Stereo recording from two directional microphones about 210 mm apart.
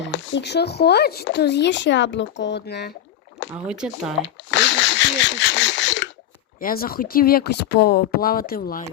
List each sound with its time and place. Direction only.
0.0 s speech: 60° left (ahead or behind)
3.7 s speech: 5° right (ahead or behind)
4.5 s a sound: 60° left (ahead or behind)
6.6 s speech: 45° left (ahead or behind)